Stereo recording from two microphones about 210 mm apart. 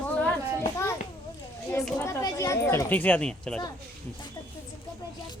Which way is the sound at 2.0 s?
15° left (ahead or behind).